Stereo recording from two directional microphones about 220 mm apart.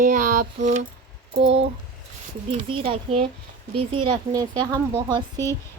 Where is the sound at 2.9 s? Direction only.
25° right (ahead or behind).